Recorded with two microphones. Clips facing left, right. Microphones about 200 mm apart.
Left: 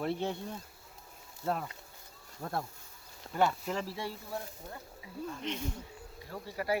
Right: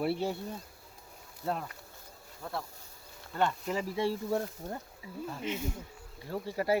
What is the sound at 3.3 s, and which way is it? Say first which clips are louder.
Speech: left 1 dB; 10° left (ahead or behind).